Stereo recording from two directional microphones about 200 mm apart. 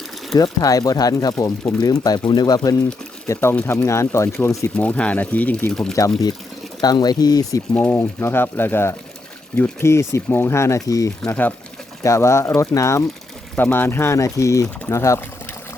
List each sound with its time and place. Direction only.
0.3 s speech: 20° left (ahead or behind); by 6.0 s 5° left (ahead or behind)
6.8 s speech: 20° left (ahead or behind)
7.7 s speech: 10° left (ahead or behind)